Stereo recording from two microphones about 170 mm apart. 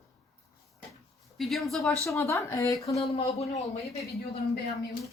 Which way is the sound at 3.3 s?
40° left (ahead or behind).